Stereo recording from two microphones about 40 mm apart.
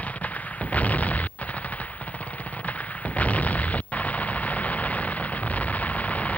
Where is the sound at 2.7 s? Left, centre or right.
Left.